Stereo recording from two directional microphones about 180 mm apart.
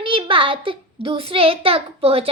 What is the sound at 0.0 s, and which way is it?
A child's voice, 30° right (ahead or behind).